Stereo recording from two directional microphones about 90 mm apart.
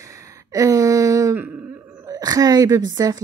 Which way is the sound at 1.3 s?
20° right (ahead or behind).